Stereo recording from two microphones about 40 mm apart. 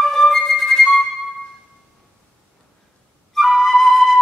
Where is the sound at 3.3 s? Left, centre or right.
Centre.